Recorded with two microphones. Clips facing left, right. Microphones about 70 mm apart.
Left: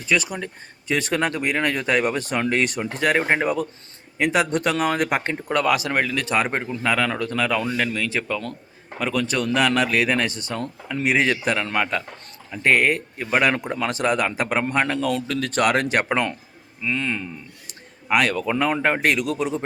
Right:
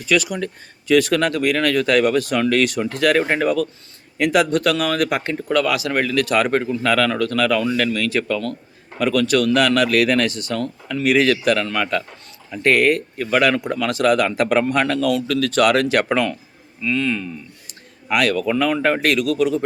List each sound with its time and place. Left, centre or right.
0.0 s speech: left
14.3 s speech: centre
14.5 s speech: left
16.8 s speech: left